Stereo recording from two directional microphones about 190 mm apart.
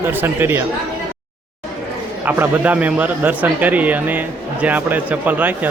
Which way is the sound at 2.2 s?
10° right (ahead or behind).